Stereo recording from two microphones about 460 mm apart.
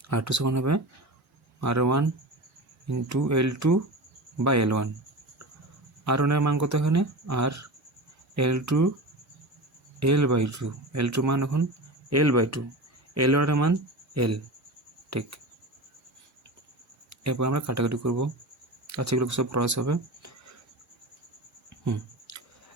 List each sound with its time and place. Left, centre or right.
0.1 s speech: right
6.1 s speech: right
10.0 s speech: right
17.1 s speech: right
22.3 s music: right